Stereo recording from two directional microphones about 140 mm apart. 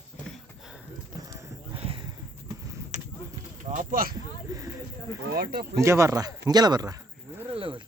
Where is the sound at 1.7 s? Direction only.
40° right (ahead or behind).